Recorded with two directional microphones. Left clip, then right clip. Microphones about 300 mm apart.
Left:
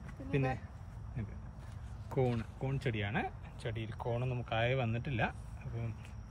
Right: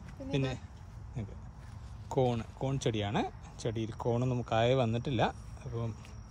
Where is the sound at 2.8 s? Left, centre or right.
Centre.